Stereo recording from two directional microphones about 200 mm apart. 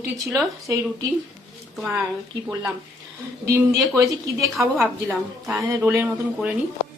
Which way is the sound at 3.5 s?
15° right (ahead or behind).